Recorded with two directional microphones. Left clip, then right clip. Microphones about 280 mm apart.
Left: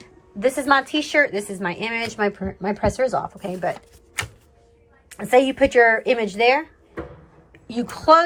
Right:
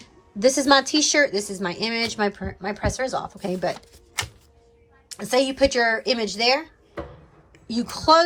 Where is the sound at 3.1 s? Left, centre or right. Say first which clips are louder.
Left 2 dB; right.